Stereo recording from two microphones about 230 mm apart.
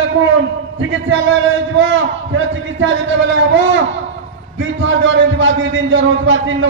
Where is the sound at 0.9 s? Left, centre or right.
Right.